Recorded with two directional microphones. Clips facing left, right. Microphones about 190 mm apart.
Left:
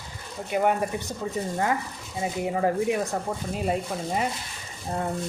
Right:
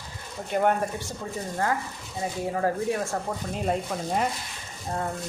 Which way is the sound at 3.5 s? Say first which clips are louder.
Even; 5° left (ahead or behind).